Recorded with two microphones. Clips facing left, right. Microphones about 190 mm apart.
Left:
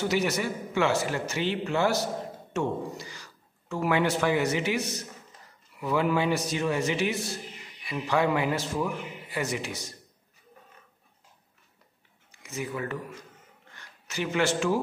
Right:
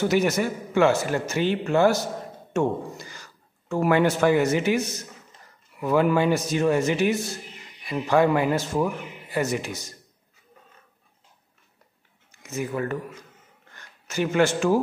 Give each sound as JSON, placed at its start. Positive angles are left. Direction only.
{"t": 0.1, "sound": "a man's voice", "side_deg": -50}
{"t": 12.3, "sound": "a man's voice", "side_deg": -45}